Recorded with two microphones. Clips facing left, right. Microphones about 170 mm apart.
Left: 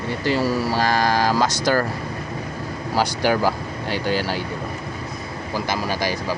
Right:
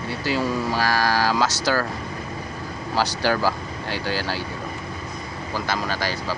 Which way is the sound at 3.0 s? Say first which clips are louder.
Left 2 dB; 15° left (ahead or behind).